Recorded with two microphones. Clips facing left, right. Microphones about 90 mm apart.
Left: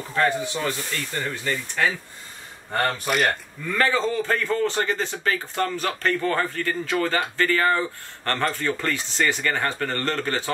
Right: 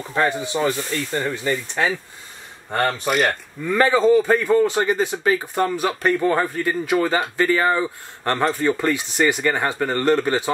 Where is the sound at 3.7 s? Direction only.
20° right (ahead or behind).